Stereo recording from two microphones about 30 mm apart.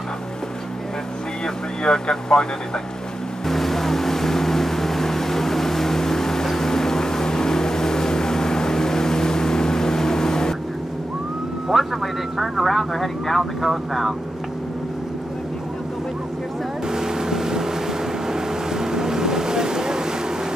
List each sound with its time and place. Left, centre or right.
1.4 s vehicle: left
3.4 s vehicle: centre
11.7 s vehicle: centre
13.4 s speech: centre
16.8 s boat: right